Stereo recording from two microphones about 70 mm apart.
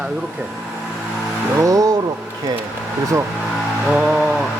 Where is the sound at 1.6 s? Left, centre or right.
Right.